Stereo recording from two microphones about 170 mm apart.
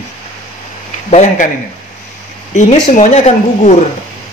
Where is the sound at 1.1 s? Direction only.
45° left (ahead or behind).